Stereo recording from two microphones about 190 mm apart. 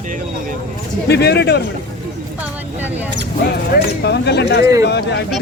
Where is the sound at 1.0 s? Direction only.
60° left (ahead or behind).